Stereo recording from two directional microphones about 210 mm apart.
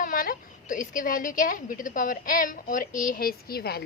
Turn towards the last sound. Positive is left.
turn(degrees=50)  # may be behind; listen again after turning